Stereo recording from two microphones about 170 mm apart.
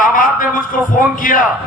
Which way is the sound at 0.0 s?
50° left (ahead or behind).